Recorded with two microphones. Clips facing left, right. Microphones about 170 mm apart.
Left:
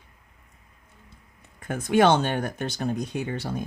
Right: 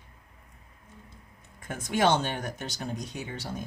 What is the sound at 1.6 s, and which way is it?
Speech, 60° left (ahead or behind).